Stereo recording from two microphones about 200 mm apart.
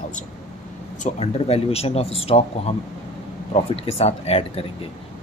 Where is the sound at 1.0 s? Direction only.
30° left (ahead or behind).